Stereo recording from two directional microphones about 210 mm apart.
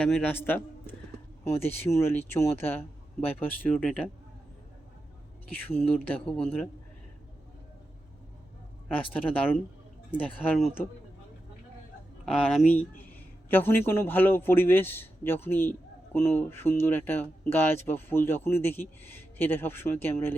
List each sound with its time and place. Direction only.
0.0 s a man's voice: 5° left (ahead or behind)
5.5 s speech: 10° left (ahead or behind)
9.1 s speech: 5° left (ahead or behind)
12.2 s speech: centre (ahead or behind)